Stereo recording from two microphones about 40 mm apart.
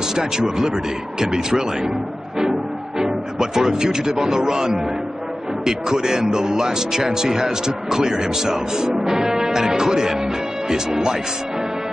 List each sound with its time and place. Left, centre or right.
0.1 s speech: centre
3.0 s speech: centre